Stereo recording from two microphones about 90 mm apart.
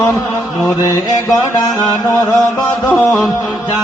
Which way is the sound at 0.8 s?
45° left (ahead or behind).